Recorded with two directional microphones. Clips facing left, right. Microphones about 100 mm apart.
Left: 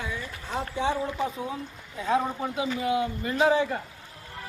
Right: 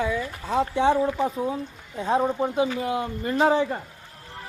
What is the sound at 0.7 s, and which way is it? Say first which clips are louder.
Speech: right 6 dB; 55° right (ahead or behind).